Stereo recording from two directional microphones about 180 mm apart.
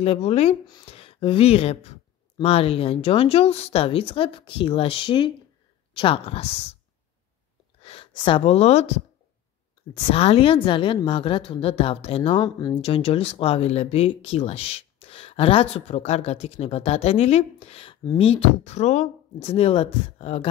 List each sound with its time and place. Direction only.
0.0 s speech: 35° left (ahead or behind)
7.8 s speech: 30° left (ahead or behind)
10.1 s a woman's voice: 35° left (ahead or behind)
12.8 s speech: 30° left (ahead or behind)